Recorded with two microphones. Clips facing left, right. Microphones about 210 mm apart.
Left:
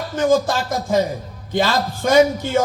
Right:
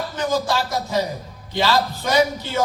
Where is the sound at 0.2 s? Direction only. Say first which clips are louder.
Left 5 dB; 50° left (ahead or behind).